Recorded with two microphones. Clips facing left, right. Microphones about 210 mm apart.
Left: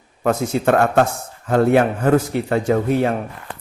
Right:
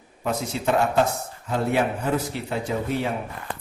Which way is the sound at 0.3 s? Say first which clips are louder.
Left 7 dB; 55° left (ahead or behind).